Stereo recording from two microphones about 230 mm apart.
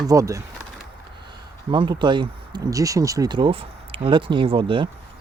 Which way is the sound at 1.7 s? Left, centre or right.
Right.